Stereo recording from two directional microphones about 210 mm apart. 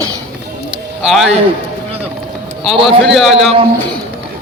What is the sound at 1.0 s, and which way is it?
Speech, centre (ahead or behind).